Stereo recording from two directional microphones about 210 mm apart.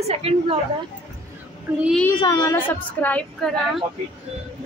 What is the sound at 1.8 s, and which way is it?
Speech, centre (ahead or behind).